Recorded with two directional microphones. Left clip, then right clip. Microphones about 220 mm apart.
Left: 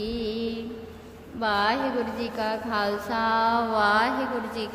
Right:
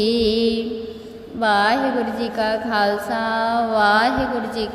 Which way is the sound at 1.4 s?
15° right (ahead or behind).